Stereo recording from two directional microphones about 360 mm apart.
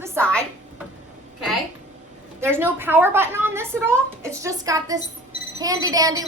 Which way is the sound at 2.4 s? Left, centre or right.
Centre.